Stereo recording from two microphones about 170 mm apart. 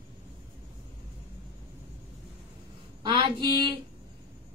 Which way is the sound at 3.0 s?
30° right (ahead or behind).